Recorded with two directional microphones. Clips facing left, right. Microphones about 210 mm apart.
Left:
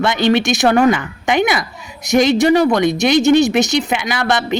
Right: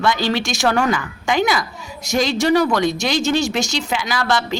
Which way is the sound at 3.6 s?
65° left (ahead or behind).